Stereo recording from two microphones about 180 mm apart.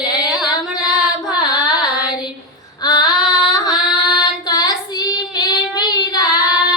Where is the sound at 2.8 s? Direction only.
20° left (ahead or behind).